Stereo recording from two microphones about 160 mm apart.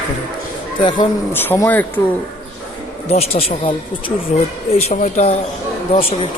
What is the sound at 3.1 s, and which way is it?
Speech, 40° left (ahead or behind).